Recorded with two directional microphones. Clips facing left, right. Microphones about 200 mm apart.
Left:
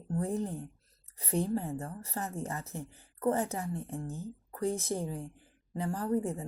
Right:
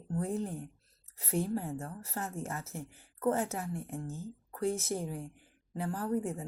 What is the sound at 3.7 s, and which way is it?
Speech, 15° right (ahead or behind).